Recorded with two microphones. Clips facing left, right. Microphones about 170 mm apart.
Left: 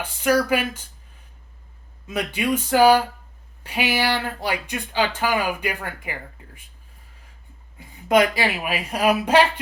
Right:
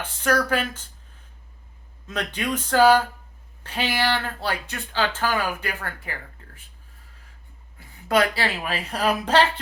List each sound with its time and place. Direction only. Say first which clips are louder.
0.0 s speech: left 3 dB; 10° left (ahead or behind)
2.0 s speech: left 4 dB; 10° left (ahead or behind)
7.8 s speech: left 3 dB; 15° left (ahead or behind)